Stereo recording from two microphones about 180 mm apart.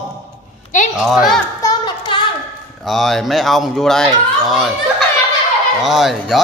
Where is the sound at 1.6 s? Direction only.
25° left (ahead or behind).